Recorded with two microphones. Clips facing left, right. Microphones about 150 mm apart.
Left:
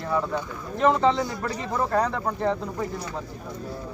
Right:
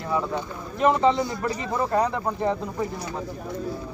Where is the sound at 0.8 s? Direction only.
10° right (ahead or behind).